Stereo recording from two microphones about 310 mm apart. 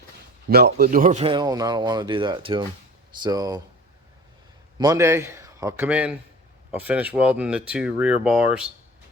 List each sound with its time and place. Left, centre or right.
0.4 s speech: right; by 3.6 s centre
4.8 s speech: centre